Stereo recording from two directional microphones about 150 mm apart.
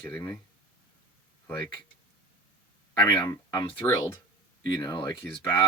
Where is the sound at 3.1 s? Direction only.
25° left (ahead or behind).